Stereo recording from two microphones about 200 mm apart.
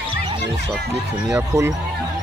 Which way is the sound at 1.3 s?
15° right (ahead or behind).